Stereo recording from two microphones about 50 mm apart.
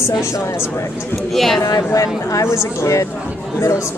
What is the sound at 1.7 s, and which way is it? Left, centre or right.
Speech, left.